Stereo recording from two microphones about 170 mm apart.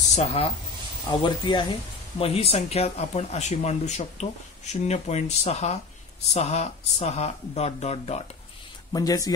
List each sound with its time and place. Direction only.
0.1 s speech: 40° left (ahead or behind)
1.2 s speech: 25° left (ahead or behind)
8.9 s speech: 20° left (ahead or behind)